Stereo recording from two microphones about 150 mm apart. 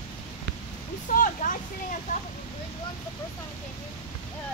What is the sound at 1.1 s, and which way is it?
Speech, 65° left (ahead or behind).